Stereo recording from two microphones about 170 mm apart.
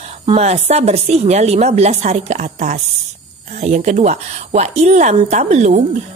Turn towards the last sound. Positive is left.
turn(degrees=-40)  # may be behind; listen again after turning